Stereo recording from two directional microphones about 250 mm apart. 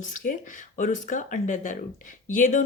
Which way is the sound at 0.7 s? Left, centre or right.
Left.